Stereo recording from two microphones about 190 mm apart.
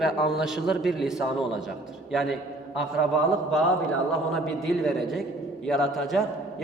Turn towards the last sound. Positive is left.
turn(degrees=0)  # may be behind; listen again after turning